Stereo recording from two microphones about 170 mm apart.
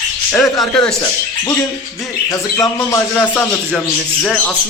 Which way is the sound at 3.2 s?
5° left (ahead or behind).